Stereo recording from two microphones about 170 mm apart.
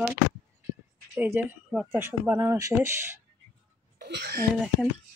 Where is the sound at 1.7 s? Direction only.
Centre (ahead or behind).